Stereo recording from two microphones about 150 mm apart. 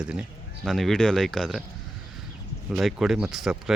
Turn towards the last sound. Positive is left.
turn(degrees=0)  # may be behind; listen again after turning